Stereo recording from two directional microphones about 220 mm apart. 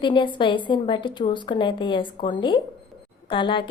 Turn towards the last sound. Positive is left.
turn(degrees=20)  # may be behind; listen again after turning